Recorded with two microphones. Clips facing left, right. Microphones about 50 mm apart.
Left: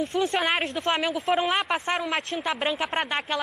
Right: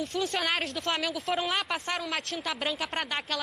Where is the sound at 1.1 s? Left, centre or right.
Centre.